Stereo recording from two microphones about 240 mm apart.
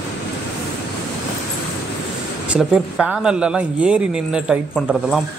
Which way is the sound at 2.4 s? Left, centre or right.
Centre.